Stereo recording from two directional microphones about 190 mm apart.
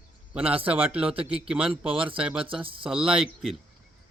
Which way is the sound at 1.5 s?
5° right (ahead or behind).